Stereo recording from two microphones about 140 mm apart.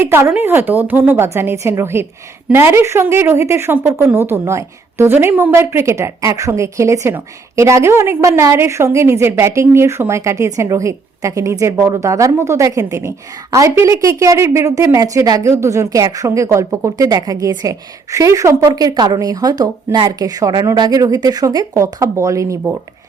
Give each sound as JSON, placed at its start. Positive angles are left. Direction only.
{"t": 0.0, "sound": "a woman's voice", "side_deg": -20}